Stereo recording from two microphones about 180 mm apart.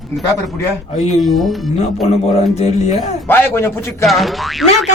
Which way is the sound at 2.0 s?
40° left (ahead or behind).